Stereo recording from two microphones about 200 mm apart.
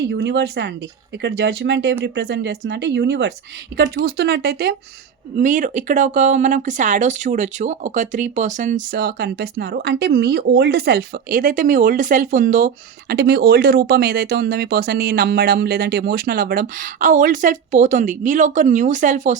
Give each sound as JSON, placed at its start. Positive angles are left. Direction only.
{"t": 0.1, "sound": "speech", "side_deg": -60}
{"t": 5.4, "sound": "speech", "side_deg": -40}